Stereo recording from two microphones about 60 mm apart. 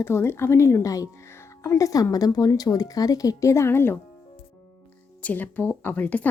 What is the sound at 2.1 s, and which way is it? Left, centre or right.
Speech, left.